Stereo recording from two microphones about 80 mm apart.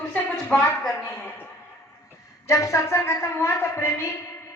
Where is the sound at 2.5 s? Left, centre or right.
Left.